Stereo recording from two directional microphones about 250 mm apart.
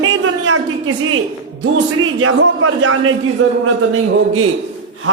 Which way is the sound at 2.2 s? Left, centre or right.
Right.